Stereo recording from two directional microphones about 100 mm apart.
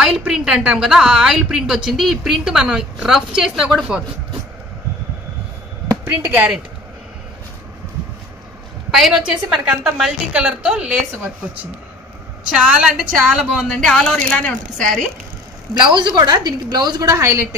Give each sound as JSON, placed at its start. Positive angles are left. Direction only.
{"t": 0.2, "sound": "a woman's voice", "side_deg": -5}
{"t": 6.0, "sound": "a woman's voice", "side_deg": -15}
{"t": 8.9, "sound": "a woman's voice", "side_deg": 0}
{"t": 12.5, "sound": "a woman's voice", "side_deg": -10}
{"t": 13.7, "sound": "speech", "side_deg": 5}
{"t": 15.9, "sound": "a woman's voice", "side_deg": -50}